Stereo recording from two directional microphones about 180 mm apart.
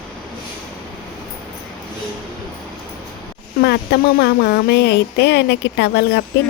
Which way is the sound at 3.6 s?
65° left (ahead or behind).